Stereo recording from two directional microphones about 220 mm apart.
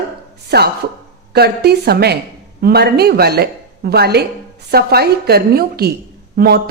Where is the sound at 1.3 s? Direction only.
45° right (ahead or behind).